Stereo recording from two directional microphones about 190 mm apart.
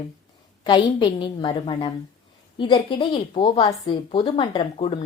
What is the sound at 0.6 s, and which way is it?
A woman's voice, 25° left (ahead or behind).